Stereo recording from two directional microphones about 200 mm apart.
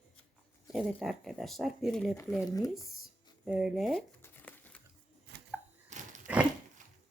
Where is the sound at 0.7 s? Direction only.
Centre (ahead or behind).